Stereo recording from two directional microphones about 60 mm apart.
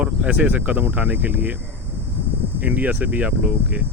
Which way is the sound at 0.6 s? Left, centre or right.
Right.